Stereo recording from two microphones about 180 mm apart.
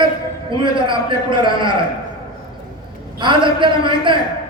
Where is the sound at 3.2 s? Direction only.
25° right (ahead or behind).